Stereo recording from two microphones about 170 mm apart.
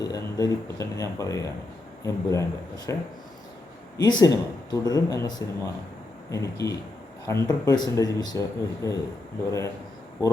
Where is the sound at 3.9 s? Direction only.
25° left (ahead or behind).